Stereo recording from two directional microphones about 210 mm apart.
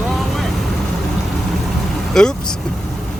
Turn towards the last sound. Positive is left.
turn(degrees=0)  # may be behind; listen again after turning